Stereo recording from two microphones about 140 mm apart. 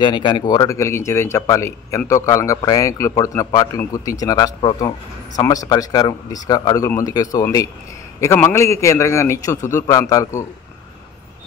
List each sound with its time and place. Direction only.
0.0 s speech: 35° left (ahead or behind)